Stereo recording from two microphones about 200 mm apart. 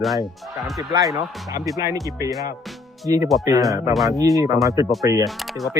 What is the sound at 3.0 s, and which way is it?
Speech, 15° right (ahead or behind).